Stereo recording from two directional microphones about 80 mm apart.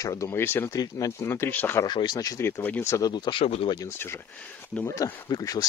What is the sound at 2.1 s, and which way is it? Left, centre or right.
Speech, left.